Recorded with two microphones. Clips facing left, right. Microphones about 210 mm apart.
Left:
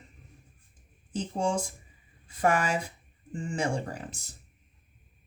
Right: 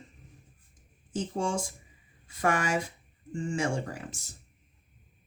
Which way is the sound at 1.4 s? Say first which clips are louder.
Left 3 dB; 35° left (ahead or behind).